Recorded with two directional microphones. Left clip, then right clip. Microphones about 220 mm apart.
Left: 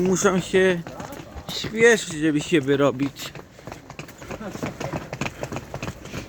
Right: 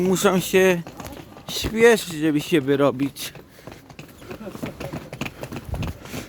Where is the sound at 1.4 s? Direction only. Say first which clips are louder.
Right 1 dB; 35° right (ahead or behind); by 3.1 s 20° right (ahead or behind).